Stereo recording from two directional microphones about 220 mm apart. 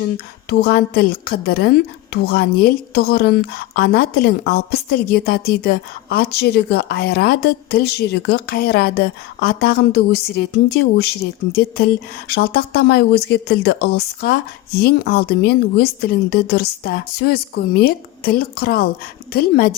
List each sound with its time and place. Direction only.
0.5 s a woman's voice: 45° left (ahead or behind)
12.3 s a woman's voice: 45° left (ahead or behind)